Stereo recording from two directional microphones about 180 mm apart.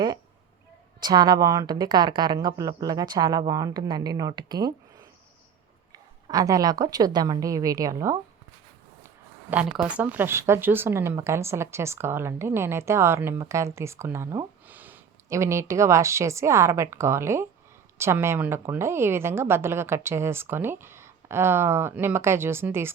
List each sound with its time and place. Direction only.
1.0 s a woman's voice: 25° right (ahead or behind)